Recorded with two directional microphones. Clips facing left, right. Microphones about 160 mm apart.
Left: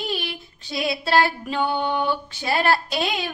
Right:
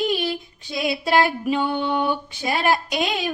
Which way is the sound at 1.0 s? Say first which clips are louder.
Right 2 dB; 15° right (ahead or behind).